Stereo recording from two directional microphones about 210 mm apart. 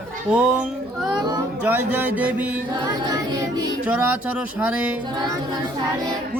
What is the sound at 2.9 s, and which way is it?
Music, 20° right (ahead or behind).